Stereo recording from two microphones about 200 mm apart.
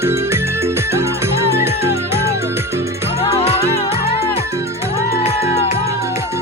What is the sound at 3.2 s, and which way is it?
Music, 30° left (ahead or behind).